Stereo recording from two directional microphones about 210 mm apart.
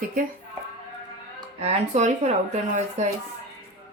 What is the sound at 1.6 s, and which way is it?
Speech, 30° right (ahead or behind).